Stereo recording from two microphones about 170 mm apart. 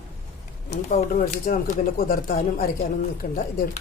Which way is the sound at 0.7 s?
50° left (ahead or behind).